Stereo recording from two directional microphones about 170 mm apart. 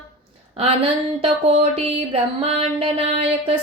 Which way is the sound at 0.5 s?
35° right (ahead or behind).